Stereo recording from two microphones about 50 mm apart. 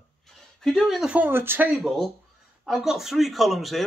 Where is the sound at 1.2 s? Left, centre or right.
Right.